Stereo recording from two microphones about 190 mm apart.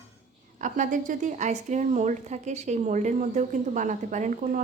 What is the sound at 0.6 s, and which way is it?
A woman's voice, 40° right (ahead or behind).